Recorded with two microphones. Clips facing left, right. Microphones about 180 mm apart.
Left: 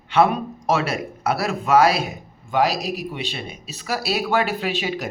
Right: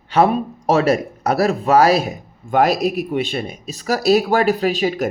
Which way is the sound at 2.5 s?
50° right (ahead or behind).